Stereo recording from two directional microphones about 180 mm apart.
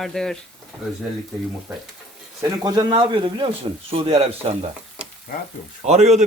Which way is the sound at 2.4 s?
20° right (ahead or behind).